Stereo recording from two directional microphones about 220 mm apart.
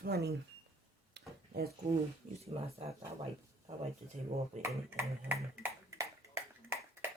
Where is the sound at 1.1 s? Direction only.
45° right (ahead or behind).